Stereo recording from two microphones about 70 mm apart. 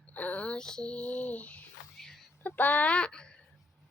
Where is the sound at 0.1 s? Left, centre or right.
Left.